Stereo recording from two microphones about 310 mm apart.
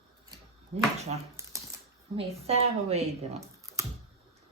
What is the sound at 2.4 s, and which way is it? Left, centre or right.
Speech, centre.